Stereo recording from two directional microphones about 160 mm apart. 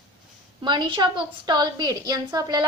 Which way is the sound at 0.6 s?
30° right (ahead or behind).